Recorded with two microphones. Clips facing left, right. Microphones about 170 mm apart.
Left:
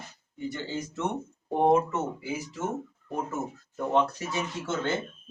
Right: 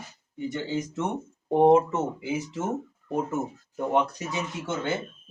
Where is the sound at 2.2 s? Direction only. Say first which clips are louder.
Right 4 dB; 20° right (ahead or behind).